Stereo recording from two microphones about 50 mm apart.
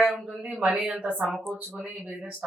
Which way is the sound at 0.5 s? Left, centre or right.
Right.